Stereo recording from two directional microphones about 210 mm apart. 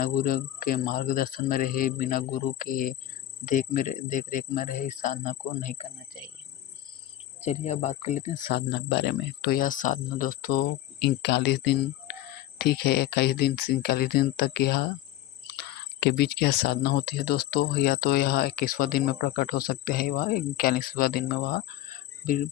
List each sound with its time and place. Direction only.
0.0 s speech: 40° left (ahead or behind); by 6.3 s 25° left (ahead or behind)
7.4 s speech: 35° left (ahead or behind)
8.5 s speech: 50° left (ahead or behind)